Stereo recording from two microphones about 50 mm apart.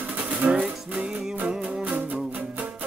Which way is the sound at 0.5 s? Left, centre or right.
Right.